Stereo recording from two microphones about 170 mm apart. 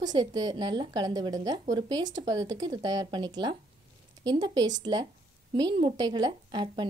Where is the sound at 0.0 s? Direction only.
25° right (ahead or behind).